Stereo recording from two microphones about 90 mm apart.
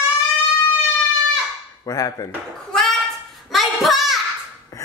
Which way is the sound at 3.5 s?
Centre (ahead or behind).